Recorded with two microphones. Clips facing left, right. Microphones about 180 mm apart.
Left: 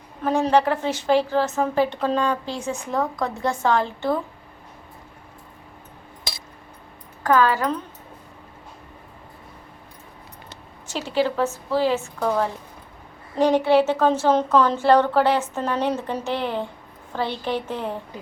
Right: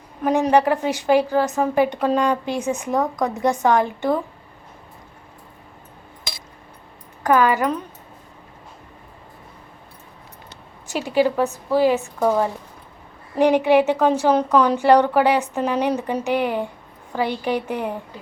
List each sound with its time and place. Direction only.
0.3 s a woman's voice: 15° right (ahead or behind)
7.2 s a woman's voice: 15° right (ahead or behind)
10.9 s a woman's voice: 15° right (ahead or behind)